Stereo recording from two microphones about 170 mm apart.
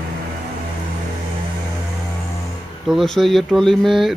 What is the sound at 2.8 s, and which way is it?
Speech, centre (ahead or behind).